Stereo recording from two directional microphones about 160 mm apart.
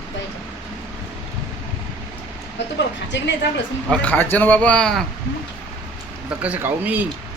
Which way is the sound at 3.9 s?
10° left (ahead or behind).